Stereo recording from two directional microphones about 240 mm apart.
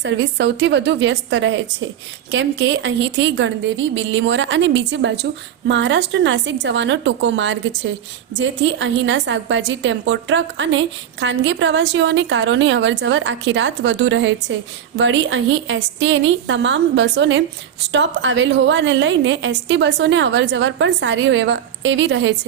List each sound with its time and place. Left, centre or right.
0.0 s a woman's voice: right